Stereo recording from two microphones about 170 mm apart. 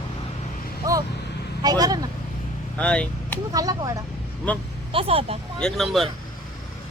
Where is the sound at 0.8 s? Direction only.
20° right (ahead or behind).